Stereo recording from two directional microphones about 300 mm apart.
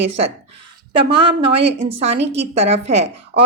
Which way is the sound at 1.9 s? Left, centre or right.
Centre.